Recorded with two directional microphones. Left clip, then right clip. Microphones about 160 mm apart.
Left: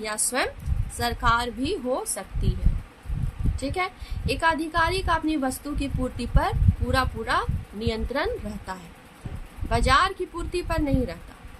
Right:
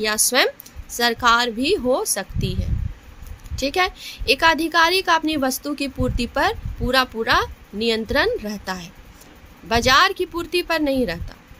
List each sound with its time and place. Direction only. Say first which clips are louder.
0.0 s a woman's voice: right 8 dB; 60° right (ahead or behind)
3.6 s a woman's voice: right 8 dB; 55° right (ahead or behind)